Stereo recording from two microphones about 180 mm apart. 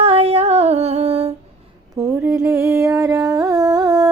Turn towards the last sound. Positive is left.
turn(degrees=-20)  # may be behind; listen again after turning